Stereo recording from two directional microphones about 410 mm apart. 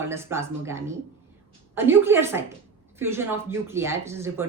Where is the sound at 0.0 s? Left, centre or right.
Centre.